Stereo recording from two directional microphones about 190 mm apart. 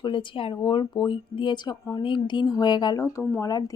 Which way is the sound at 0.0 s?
25° left (ahead or behind).